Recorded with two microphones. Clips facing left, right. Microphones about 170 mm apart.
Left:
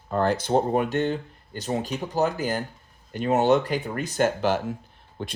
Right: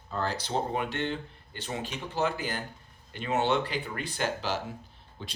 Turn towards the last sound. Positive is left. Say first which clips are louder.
# left 9 dB
turn(degrees=55)  # may be behind; listen again after turning